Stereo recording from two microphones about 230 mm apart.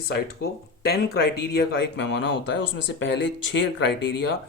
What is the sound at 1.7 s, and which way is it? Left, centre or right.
Speech, left.